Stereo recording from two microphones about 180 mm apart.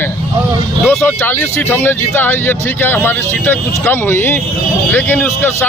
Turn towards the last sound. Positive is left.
turn(degrees=10)  # may be behind; listen again after turning